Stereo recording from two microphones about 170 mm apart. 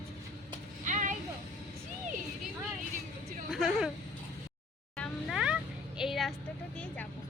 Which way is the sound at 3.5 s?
Centre (ahead or behind).